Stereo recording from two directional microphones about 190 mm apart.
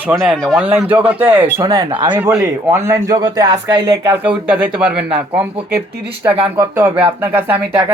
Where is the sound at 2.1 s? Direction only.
15° right (ahead or behind).